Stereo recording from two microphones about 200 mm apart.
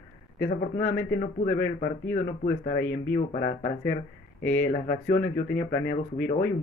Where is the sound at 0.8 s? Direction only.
40° left (ahead or behind).